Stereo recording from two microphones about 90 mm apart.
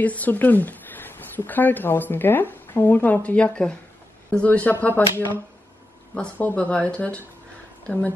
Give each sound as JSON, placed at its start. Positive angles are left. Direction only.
{"t": 0.0, "sound": "a woman's voice", "side_deg": 15}
{"t": 6.3, "sound": "speech", "side_deg": 15}